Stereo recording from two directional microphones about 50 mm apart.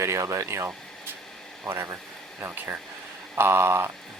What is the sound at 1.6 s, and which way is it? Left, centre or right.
Speech, right.